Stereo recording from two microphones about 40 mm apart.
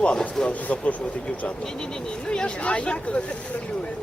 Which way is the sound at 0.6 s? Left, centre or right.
Left.